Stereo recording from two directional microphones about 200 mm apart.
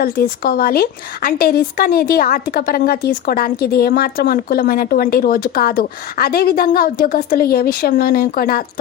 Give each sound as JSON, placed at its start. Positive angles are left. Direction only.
{"t": 0.0, "sound": "speech", "side_deg": 50}